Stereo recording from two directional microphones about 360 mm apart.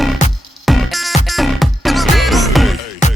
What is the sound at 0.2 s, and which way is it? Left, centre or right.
Music, centre.